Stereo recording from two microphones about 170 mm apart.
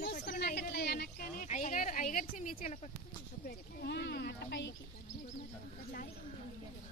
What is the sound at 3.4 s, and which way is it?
Speech, 75° left (ahead or behind).